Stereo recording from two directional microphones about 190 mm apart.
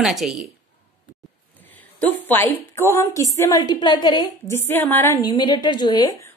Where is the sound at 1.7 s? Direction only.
10° left (ahead or behind).